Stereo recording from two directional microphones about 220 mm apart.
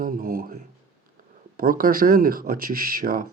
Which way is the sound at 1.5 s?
40° right (ahead or behind).